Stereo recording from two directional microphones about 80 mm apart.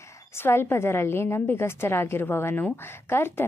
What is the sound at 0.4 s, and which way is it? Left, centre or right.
A woman's voice, left.